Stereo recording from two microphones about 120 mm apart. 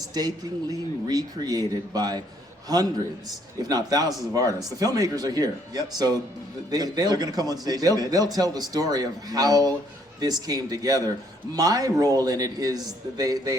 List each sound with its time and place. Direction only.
0.1 s speech: 35° right (ahead or behind)